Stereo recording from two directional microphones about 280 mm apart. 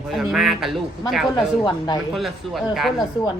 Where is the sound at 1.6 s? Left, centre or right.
Centre.